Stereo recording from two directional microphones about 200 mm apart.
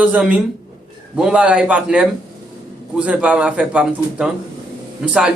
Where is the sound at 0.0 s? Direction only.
5° right (ahead or behind).